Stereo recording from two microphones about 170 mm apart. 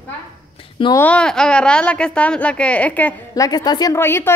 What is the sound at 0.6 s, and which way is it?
Speech, 30° left (ahead or behind).